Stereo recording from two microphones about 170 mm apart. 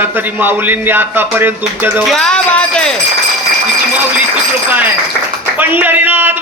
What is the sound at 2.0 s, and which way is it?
Music, 5° left (ahead or behind).